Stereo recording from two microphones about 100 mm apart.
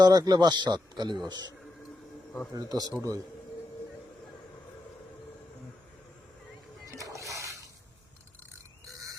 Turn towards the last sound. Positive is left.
turn(degrees=-30)  # may be behind; listen again after turning